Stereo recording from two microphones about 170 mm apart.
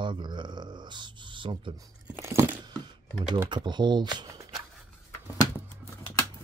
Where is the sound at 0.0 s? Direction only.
25° right (ahead or behind).